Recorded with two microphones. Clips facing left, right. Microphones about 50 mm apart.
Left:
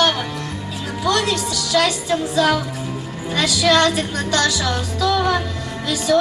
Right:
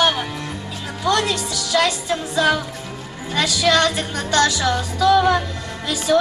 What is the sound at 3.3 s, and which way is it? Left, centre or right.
Music, centre.